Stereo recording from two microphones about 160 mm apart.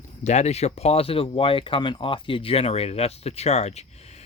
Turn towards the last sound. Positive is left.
turn(degrees=40)  # may be behind; listen again after turning